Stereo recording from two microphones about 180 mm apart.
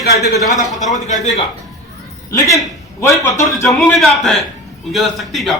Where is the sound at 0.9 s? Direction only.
40° left (ahead or behind).